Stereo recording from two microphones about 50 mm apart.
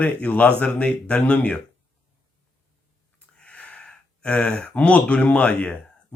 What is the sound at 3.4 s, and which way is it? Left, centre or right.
Speech, left.